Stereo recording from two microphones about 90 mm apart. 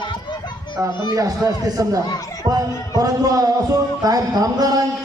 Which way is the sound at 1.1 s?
40° right (ahead or behind).